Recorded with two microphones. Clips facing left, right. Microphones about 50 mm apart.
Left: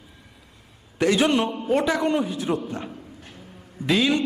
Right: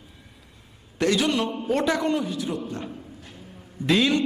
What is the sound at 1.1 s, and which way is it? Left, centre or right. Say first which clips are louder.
Speech: left 4 dB; left.